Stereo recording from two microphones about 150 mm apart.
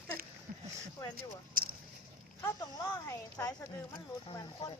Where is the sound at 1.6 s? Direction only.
70° right (ahead or behind).